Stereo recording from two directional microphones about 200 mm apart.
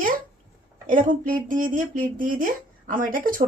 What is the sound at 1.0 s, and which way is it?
Speech, 40° right (ahead or behind).